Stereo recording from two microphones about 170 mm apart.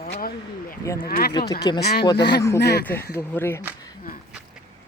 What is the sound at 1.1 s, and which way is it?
Speech, 65° left (ahead or behind).